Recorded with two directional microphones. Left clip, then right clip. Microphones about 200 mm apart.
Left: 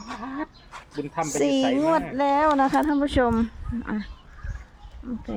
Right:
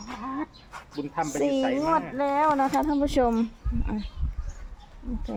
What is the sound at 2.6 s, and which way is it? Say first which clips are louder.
Speech: left 3 dB; 25° left (ahead or behind).